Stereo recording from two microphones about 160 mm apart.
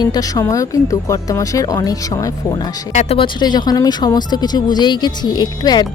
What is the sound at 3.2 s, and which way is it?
A woman's voice, 30° left (ahead or behind).